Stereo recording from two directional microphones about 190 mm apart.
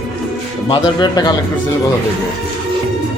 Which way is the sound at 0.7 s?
20° left (ahead or behind).